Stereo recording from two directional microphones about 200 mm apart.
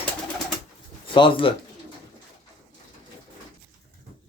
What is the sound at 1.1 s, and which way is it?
Speech, 25° left (ahead or behind).